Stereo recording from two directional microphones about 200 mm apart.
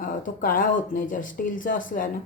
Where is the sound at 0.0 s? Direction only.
45° left (ahead or behind).